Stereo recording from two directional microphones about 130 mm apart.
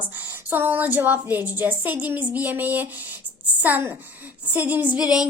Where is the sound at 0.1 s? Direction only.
15° right (ahead or behind).